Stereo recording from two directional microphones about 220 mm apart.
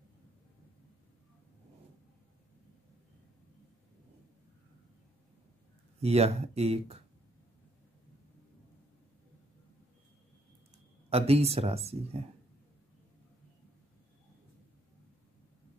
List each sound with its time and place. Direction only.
6.0 s speech: 30° right (ahead or behind)
11.1 s speech: 25° right (ahead or behind)